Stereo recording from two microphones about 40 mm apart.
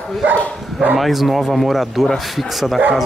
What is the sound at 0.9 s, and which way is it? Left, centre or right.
Speech, centre.